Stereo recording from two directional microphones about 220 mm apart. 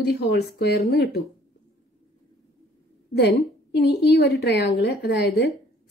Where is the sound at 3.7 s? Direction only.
50° left (ahead or behind).